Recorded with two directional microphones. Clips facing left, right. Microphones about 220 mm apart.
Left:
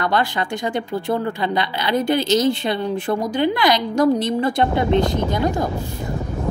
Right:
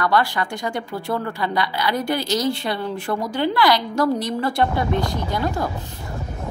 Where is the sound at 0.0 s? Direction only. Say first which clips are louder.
Even; 20° left (ahead or behind).